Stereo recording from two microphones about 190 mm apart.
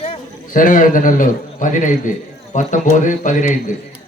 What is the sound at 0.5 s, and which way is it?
A man's voice, 45° left (ahead or behind).